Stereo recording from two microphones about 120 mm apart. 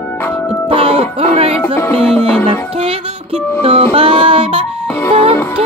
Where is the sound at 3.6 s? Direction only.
50° right (ahead or behind).